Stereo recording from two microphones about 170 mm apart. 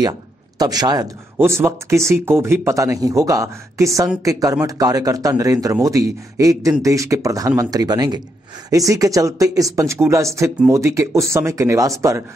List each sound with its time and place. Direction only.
0.6 s speech: 20° right (ahead or behind)